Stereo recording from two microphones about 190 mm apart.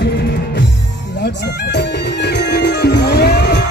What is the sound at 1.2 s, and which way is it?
Music, 60° left (ahead or behind).